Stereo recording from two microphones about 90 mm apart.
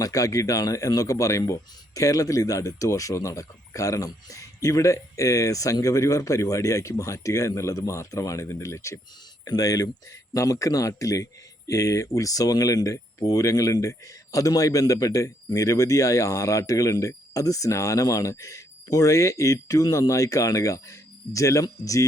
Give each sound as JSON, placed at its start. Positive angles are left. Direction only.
{"t": 0.0, "sound": "a man's voice", "side_deg": 40}